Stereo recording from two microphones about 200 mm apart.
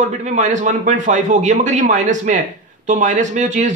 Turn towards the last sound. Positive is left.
turn(degrees=-35)  # may be behind; listen again after turning